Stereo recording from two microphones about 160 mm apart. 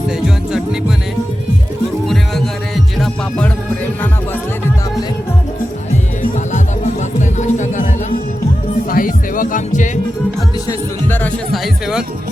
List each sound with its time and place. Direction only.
3.0 s music: 5° left (ahead or behind)
6.5 s music: 50° left (ahead or behind)
8.9 s music: 60° left (ahead or behind)
10.7 s music: 10° left (ahead or behind)
11.5 s music: centre (ahead or behind)